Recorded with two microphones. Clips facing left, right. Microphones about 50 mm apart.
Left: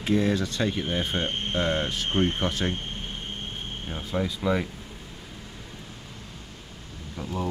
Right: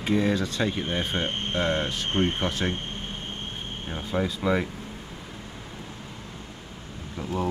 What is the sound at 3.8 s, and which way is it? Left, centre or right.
Speech, centre.